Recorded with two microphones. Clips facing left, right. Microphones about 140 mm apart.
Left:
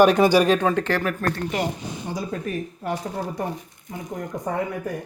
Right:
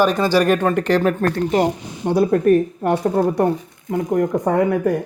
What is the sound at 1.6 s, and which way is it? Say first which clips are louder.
Speech: right 8 dB; 60° right (ahead or behind).